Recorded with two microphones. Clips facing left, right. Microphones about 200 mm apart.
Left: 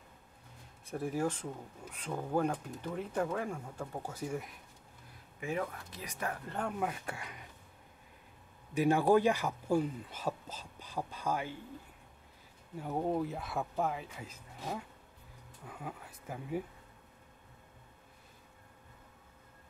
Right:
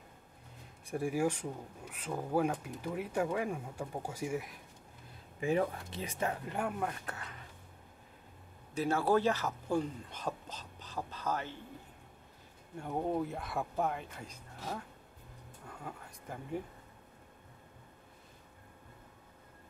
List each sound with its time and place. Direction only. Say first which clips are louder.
0.8 s speech: right 2 dB; 10° right (ahead or behind)
5.4 s speech: right 5 dB; 30° right (ahead or behind); by 6.8 s 10° right (ahead or behind)
6.8 s speech: left 1 dB; 10° left (ahead or behind)
8.7 s speech: left 3 dB; 15° left (ahead or behind)
12.7 s speech: left 1 dB; 5° left (ahead or behind)